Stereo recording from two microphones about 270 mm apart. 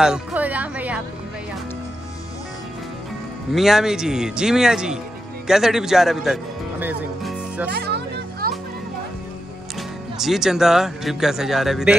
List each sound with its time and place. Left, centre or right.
0.0 s speech: centre
3.5 s speech: centre
7.7 s music: right
10.1 s speech: centre